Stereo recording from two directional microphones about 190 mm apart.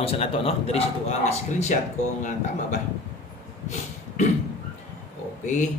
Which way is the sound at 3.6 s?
40° left (ahead or behind).